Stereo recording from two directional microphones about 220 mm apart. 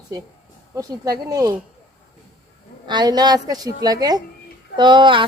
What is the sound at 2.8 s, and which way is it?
Speech, 20° right (ahead or behind).